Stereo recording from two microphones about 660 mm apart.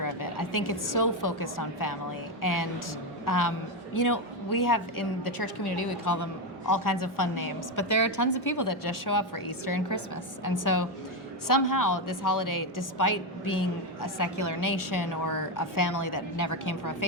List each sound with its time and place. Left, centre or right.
0.0 s a woman's voice: left